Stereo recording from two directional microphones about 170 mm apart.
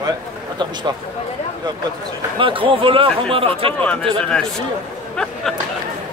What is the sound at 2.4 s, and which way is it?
Speech, 30° right (ahead or behind).